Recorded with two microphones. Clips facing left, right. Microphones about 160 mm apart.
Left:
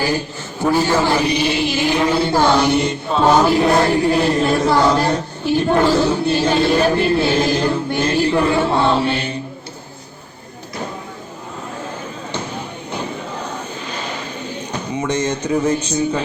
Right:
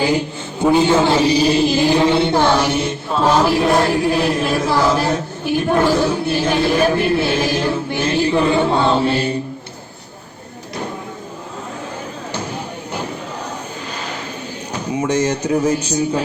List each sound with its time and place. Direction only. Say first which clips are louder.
0.6 s a man's voice: right 3 dB; 20° right (ahead or behind)
2.7 s chant: left 2 dB; centre (ahead or behind)
6.0 s speech: left 1 dB; 10° right (ahead or behind)
6.7 s chant: even; 5° right (ahead or behind)
8.0 s speech: right 1 dB; 10° right (ahead or behind)
8.7 s chant: even; centre (ahead or behind)
9.0 s choir: right 3 dB; 35° right (ahead or behind)
14.9 s speech: right 3 dB; 10° right (ahead or behind)